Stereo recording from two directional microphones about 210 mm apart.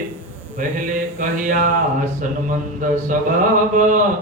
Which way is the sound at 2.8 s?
40° right (ahead or behind).